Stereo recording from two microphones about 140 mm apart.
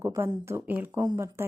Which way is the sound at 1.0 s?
25° right (ahead or behind).